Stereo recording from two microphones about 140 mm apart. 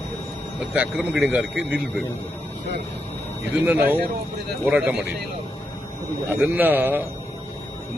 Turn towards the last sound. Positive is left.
turn(degrees=-15)  # may be behind; listen again after turning